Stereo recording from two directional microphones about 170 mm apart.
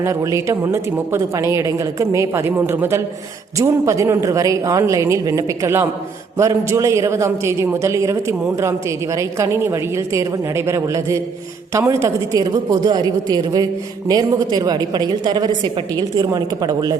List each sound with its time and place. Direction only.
0.0 s a woman's voice: 15° right (ahead or behind)